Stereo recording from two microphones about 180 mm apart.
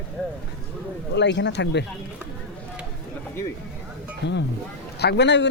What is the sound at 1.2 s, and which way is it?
Speech, 75° left (ahead or behind).